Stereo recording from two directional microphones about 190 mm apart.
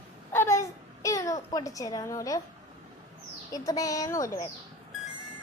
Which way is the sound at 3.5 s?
20° left (ahead or behind).